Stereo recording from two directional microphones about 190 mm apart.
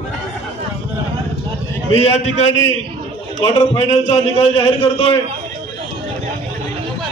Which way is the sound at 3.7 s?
35° left (ahead or behind).